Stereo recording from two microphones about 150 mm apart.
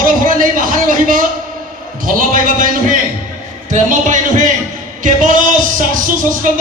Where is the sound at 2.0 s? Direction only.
65° right (ahead or behind).